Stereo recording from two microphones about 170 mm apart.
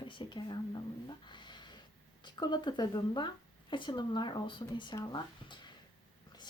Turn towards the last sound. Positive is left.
turn(degrees=25)  # may be behind; listen again after turning